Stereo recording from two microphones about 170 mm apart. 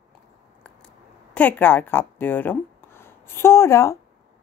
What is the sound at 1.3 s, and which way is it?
Speech, 10° left (ahead or behind).